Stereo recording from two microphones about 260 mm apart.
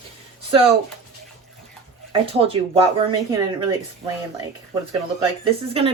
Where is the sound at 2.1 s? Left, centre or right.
Right.